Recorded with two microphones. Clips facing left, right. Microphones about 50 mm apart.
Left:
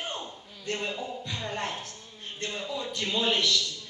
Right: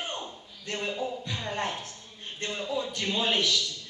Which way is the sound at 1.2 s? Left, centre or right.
Centre.